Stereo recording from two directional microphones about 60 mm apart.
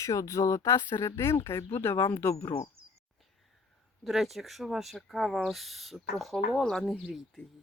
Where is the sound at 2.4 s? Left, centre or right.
Left.